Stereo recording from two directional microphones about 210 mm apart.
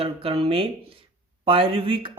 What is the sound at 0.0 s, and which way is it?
Speech, 25° right (ahead or behind).